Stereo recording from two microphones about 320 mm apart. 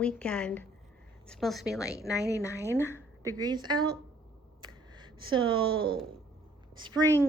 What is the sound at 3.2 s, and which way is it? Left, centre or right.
A woman's voice, centre.